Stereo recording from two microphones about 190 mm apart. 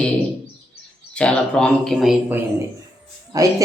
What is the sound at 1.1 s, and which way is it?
Speech, 5° left (ahead or behind).